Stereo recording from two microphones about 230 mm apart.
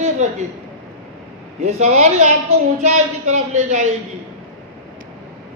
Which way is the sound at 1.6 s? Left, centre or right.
Right.